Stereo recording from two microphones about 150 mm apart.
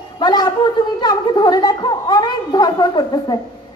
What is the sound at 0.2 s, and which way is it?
A woman's voice, 30° left (ahead or behind).